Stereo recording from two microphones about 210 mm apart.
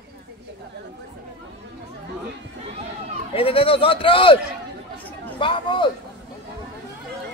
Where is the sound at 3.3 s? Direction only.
25° left (ahead or behind).